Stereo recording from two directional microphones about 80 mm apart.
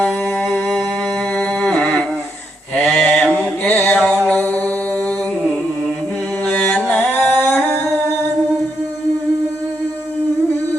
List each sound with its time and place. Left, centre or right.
0.0 s a sound: centre
2.8 s mantra: centre
6.4 s music: centre